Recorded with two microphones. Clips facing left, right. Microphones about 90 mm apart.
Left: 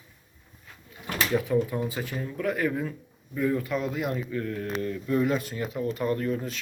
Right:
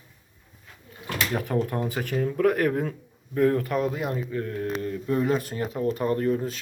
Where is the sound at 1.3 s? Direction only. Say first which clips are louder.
Left 2 dB; 55° right (ahead or behind).